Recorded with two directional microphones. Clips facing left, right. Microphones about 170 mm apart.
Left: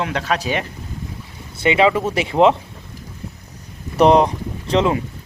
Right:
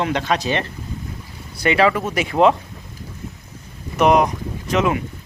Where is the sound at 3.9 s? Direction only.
30° left (ahead or behind).